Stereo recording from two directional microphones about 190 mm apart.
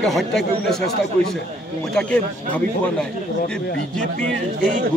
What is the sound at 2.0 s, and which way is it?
A man's voice, 5° left (ahead or behind).